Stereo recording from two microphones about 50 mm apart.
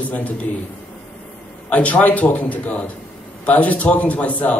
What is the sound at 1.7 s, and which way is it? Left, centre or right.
Speech, left.